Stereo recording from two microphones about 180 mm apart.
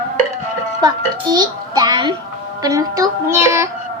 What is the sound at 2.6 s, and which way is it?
Music, 20° right (ahead or behind).